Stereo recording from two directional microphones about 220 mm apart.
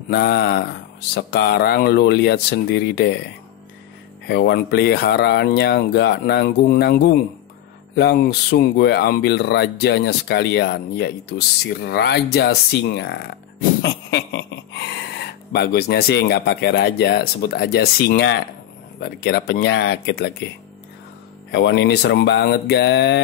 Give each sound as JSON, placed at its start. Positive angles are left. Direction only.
{"t": 0.1, "sound": "speech", "side_deg": 50}
{"t": 4.3, "sound": "speech", "side_deg": 50}
{"t": 21.5, "sound": "speech", "side_deg": 50}